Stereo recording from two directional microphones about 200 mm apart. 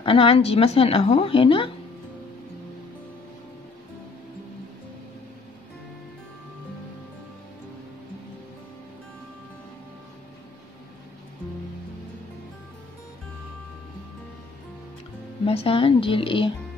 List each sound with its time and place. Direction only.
0.0 s speech: 25° left (ahead or behind)
15.4 s speech: 30° left (ahead or behind)